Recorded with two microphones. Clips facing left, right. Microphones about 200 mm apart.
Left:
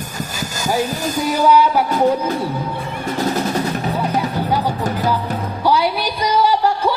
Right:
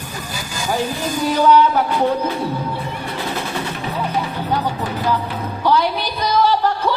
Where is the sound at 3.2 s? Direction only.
40° left (ahead or behind).